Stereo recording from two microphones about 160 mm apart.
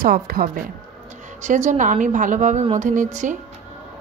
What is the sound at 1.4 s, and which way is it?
A woman's voice, 50° right (ahead or behind).